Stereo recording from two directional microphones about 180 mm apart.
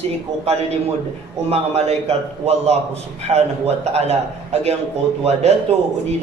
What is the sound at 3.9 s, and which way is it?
Speech, 35° right (ahead or behind).